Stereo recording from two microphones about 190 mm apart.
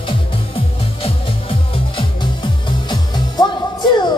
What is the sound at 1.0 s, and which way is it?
Music, 25° left (ahead or behind).